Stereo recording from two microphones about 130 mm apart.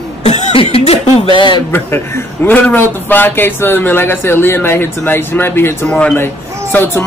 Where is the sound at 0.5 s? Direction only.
50° left (ahead or behind).